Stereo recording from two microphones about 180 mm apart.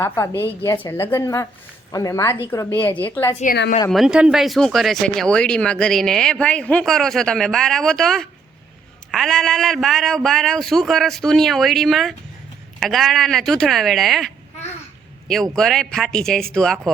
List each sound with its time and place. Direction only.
0.4 s a woman's voice: 10° left (ahead or behind)
3.4 s a woman's voice: 55° left (ahead or behind)
3.8 s speech: centre (ahead or behind)
15.3 s speech: centre (ahead or behind)